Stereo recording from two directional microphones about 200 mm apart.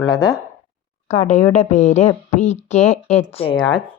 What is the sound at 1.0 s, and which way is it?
A woman's voice, 35° left (ahead or behind).